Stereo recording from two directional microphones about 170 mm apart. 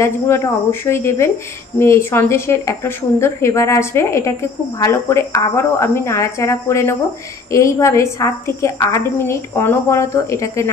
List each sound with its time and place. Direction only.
0.0 s a woman's voice: 15° left (ahead or behind)